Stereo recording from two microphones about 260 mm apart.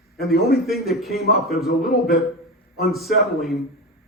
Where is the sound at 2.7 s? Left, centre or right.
Centre.